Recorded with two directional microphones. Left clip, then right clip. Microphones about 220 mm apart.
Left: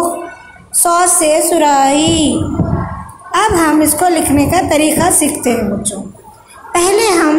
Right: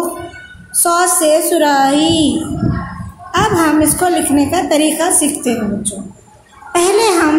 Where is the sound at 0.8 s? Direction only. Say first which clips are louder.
Left 1 dB; centre (ahead or behind).